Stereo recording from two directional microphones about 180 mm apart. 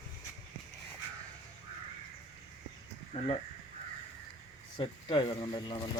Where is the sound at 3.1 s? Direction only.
35° left (ahead or behind).